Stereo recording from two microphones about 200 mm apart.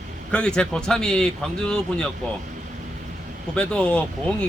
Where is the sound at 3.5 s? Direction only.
5° left (ahead or behind).